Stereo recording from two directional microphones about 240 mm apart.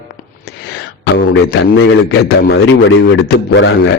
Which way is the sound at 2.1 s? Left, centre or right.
Left.